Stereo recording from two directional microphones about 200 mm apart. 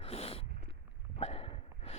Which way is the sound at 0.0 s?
30° left (ahead or behind).